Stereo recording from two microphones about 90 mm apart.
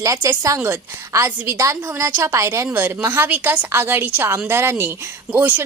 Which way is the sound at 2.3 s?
35° right (ahead or behind).